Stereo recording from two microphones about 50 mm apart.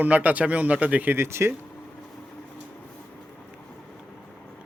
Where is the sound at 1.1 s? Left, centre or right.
Right.